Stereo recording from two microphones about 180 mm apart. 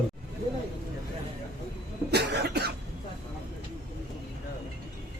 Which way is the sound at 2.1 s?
65° right (ahead or behind).